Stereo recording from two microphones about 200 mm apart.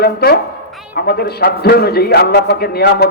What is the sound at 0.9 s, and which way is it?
A man's voice, 50° left (ahead or behind).